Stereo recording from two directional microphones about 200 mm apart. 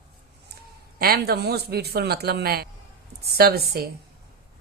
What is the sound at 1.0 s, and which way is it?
A woman's voice, 50° right (ahead or behind).